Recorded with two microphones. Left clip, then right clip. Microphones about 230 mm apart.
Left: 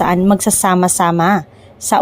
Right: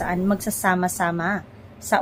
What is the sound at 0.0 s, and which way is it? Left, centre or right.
Speech, left.